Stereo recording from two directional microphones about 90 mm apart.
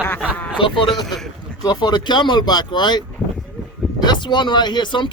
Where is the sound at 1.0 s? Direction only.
5° left (ahead or behind).